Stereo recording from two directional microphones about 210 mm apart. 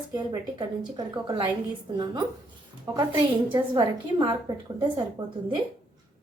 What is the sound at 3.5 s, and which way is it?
A woman's voice, 20° right (ahead or behind).